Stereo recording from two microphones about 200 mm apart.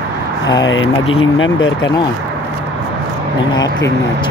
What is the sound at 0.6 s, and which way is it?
Speech, 75° left (ahead or behind).